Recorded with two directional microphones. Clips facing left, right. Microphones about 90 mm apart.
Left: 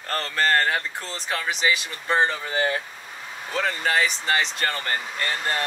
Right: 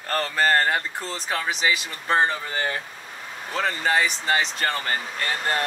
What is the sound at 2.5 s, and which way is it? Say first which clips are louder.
Speech: left 3 dB; 10° left (ahead or behind).